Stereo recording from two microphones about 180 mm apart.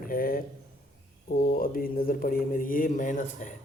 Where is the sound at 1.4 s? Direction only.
55° left (ahead or behind).